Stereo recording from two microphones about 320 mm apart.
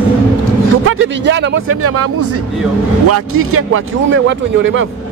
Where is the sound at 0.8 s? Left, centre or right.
Right.